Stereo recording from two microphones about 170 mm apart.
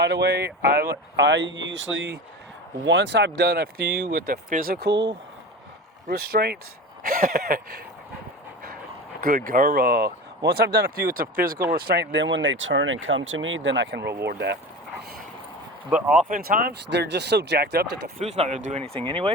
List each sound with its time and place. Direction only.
0.0 s speech: 85° right
6.1 s speech: 65° right (ahead or behind)
7.0 s speech: 55° right (ahead or behind)
9.2 s speech: 55° right (ahead or behind)
11.7 s speech: 75° right (ahead or behind)
15.9 s speech: 5° right (ahead or behind)
16.3 s speech: 60° right (ahead or behind)
18.2 s speech: 40° right (ahead or behind)